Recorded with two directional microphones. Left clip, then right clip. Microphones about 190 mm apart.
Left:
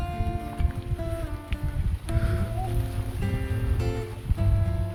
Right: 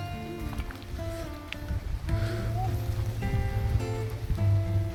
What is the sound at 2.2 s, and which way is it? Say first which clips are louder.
Music: left 1 dB; centre (ahead or behind).